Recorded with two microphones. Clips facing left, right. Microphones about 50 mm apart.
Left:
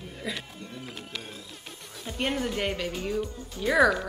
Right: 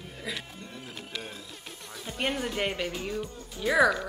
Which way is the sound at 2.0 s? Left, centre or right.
Centre.